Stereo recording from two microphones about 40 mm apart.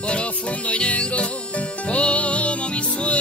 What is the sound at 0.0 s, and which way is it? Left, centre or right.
Music, left.